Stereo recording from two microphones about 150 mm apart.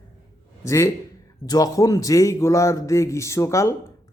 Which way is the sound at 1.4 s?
25° left (ahead or behind).